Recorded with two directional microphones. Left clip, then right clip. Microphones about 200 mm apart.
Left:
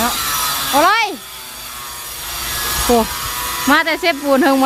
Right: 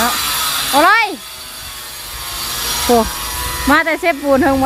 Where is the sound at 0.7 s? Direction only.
Centre (ahead or behind).